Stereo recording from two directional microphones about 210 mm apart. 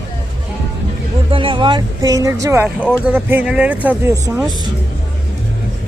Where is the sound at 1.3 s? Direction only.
25° right (ahead or behind); by 4.4 s 10° right (ahead or behind).